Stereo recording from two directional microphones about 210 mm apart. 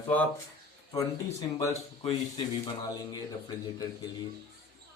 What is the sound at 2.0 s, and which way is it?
Speech, 20° left (ahead or behind).